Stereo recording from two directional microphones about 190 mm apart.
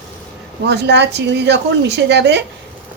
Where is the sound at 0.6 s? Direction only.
60° right (ahead or behind).